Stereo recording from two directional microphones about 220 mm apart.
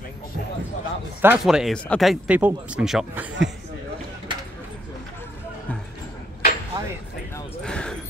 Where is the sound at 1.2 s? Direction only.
5° right (ahead or behind).